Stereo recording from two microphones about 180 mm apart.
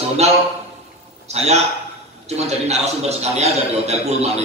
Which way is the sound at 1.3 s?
35° right (ahead or behind).